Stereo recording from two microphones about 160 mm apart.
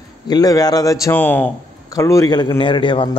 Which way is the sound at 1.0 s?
10° left (ahead or behind).